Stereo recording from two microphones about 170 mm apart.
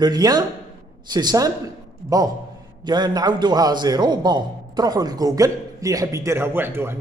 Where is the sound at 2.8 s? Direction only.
25° right (ahead or behind).